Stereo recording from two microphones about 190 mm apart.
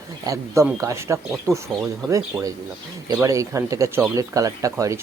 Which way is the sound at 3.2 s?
15° right (ahead or behind).